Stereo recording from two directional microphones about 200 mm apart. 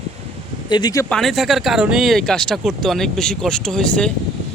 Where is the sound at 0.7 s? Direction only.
20° left (ahead or behind).